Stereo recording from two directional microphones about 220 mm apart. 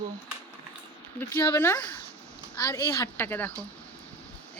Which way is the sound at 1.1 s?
10° left (ahead or behind).